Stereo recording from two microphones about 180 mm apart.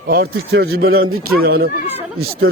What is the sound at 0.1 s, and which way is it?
Speech, 60° right (ahead or behind).